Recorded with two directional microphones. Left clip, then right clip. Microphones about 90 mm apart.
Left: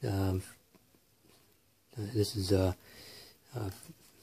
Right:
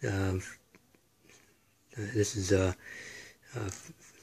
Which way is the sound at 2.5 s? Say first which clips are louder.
Right 2 dB; 20° left (ahead or behind).